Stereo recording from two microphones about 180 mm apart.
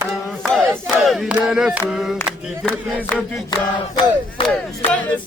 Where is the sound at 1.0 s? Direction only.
Centre (ahead or behind).